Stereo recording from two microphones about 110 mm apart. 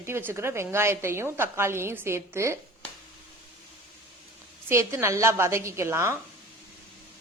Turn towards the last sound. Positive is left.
turn(degrees=-25)  # may be behind; listen again after turning